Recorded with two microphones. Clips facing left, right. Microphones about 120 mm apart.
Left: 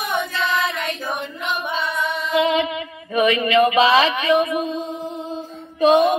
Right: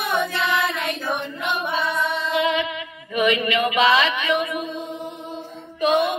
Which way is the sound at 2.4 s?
30° left (ahead or behind).